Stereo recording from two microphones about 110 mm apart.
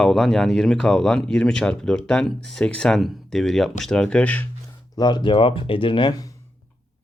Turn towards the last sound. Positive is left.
turn(degrees=40)  # may be behind; listen again after turning